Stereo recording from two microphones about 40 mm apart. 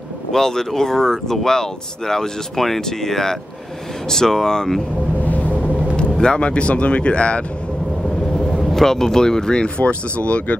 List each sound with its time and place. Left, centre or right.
0.3 s speech: centre
6.2 s speech: left
8.5 s speech: centre; by 10.6 s left